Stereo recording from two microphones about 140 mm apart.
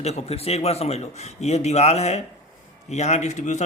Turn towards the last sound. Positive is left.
turn(degrees=55)  # may be behind; listen again after turning